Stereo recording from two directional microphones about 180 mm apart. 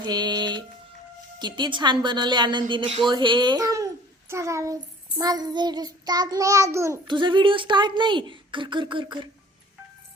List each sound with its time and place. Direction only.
0.0 s music: 25° right (ahead or behind)
1.4 s a woman's voice: 25° right (ahead or behind)
4.3 s child singing: 15° right (ahead or behind)
7.2 s a woman's voice: 25° right (ahead or behind)